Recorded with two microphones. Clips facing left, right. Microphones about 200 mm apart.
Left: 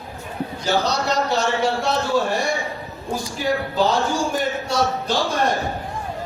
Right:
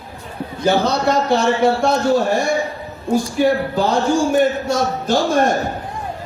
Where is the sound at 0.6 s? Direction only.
55° right (ahead or behind).